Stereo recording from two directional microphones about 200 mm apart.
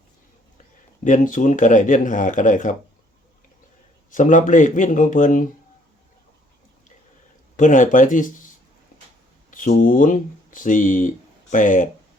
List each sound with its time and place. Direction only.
1.0 s speech: 40° left (ahead or behind)
4.1 s speech: 40° left (ahead or behind)
7.5 s speech: 40° left (ahead or behind)
9.5 s speech: 40° left (ahead or behind)